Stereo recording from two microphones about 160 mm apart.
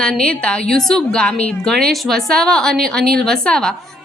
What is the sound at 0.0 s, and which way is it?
A woman's voice, 5° left (ahead or behind).